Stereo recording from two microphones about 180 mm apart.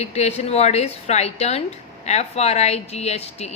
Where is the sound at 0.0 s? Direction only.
35° left (ahead or behind).